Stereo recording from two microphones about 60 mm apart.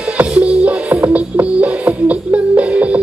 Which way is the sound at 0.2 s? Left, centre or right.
Centre.